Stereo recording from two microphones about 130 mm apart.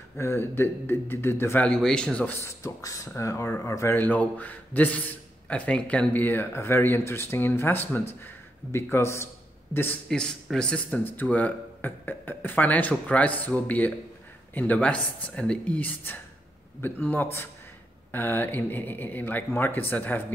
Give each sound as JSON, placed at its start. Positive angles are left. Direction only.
{"t": 0.2, "sound": "speech", "side_deg": 20}
{"t": 1.7, "sound": "speech", "side_deg": 5}
{"t": 2.4, "sound": "speech", "side_deg": 25}
{"t": 10.0, "sound": "speech", "side_deg": 5}